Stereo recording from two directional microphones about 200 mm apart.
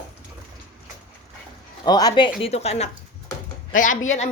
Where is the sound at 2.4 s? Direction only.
30° left (ahead or behind).